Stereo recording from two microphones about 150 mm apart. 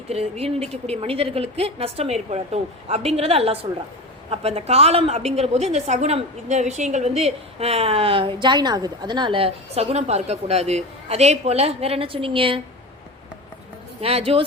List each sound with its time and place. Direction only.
0.1 s a woman's voice: 40° right (ahead or behind)
14.0 s a woman's voice: 40° right (ahead or behind)